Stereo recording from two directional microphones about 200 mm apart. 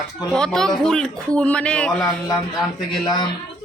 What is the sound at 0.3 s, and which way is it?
A man's voice, centre (ahead or behind).